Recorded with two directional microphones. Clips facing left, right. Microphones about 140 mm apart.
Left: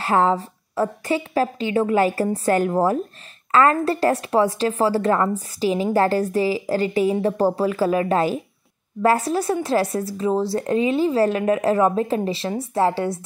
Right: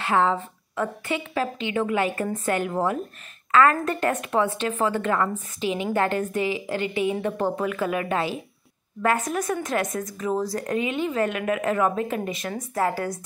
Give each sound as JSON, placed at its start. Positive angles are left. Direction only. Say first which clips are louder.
{"t": 0.0, "sound": "speech", "louder": "left 3 dB", "side_deg": 40}